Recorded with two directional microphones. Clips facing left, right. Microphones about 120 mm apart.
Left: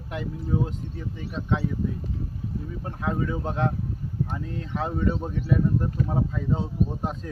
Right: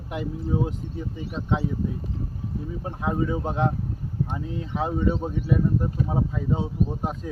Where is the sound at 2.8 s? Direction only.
15° right (ahead or behind).